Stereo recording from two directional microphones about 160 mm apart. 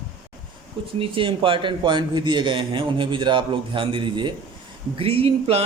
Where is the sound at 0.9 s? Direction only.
35° right (ahead or behind).